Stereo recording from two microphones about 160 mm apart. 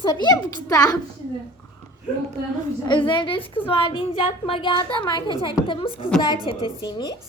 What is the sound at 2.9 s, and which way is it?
A woman's voice, 30° left (ahead or behind).